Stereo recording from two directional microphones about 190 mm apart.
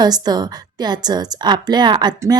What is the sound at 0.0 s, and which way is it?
A woman's voice, 20° right (ahead or behind).